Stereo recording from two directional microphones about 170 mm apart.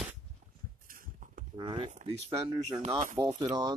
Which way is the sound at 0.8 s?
55° right (ahead or behind).